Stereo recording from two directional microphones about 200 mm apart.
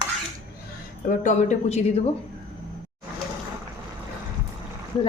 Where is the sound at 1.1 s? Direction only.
35° left (ahead or behind).